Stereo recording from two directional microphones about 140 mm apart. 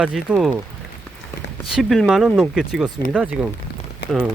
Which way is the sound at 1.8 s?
Centre (ahead or behind).